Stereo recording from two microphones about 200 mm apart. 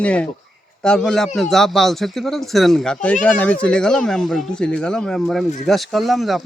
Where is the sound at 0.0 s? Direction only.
5° left (ahead or behind).